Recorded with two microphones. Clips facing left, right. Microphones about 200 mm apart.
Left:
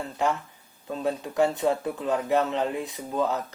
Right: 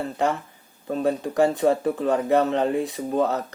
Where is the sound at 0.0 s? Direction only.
60° right (ahead or behind).